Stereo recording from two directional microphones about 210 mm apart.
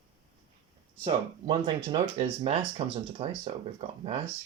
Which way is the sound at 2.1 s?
30° right (ahead or behind).